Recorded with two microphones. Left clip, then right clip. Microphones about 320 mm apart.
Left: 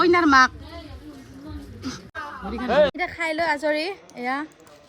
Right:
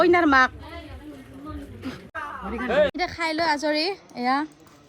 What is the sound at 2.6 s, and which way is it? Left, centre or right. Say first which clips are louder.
Speech: left 2 dB; left.